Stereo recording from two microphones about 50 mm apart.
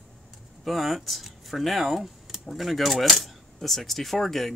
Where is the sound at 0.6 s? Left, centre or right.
Centre.